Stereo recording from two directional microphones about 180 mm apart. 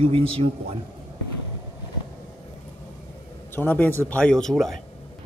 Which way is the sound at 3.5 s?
10° left (ahead or behind).